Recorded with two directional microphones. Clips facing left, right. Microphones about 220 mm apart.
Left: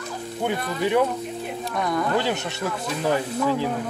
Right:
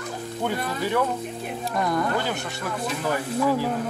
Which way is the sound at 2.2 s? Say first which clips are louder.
Left 3 dB; 25° left (ahead or behind).